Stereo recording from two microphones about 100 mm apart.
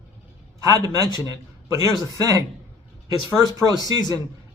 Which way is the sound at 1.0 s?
45° left (ahead or behind).